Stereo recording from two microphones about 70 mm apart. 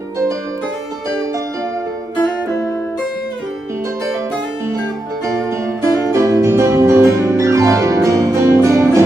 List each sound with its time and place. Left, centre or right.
5.2 s music: right